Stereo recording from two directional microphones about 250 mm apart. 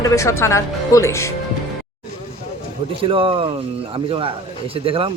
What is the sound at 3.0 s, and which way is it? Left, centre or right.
Speech, right.